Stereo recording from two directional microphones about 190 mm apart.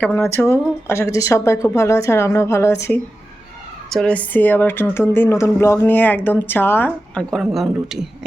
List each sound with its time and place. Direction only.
0.0 s speech: 10° left (ahead or behind)
3.8 s speech: 5° left (ahead or behind)